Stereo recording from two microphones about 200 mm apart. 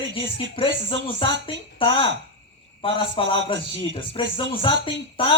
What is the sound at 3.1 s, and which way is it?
Speech, 25° left (ahead or behind).